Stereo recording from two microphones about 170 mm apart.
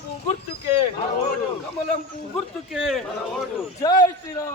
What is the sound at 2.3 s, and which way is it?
Speech, 5° right (ahead or behind).